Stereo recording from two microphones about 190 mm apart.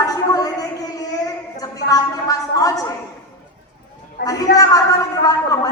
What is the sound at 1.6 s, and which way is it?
A woman's voice, 20° left (ahead or behind).